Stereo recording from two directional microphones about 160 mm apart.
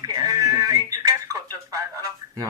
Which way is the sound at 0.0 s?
25° right (ahead or behind).